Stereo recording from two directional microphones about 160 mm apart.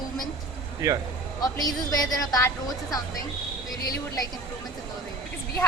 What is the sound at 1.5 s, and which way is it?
Speech, 20° left (ahead or behind).